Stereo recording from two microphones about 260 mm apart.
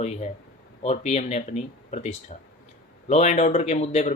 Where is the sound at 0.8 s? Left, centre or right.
Left.